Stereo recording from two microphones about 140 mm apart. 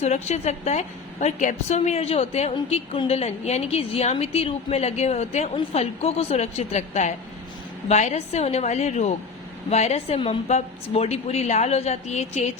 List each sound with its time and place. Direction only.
0.0 s a woman's voice: 55° left (ahead or behind)